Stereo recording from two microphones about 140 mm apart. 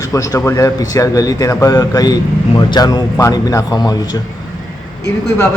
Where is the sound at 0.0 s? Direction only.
20° left (ahead or behind).